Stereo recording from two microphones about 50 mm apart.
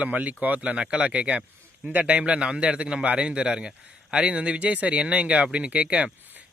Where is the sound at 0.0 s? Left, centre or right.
Right.